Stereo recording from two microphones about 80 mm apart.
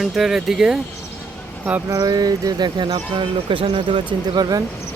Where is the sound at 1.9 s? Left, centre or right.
Right.